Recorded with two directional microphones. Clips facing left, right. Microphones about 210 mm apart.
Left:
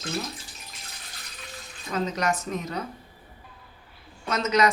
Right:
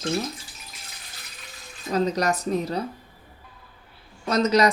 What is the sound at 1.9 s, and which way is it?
Speech, 35° right (ahead or behind).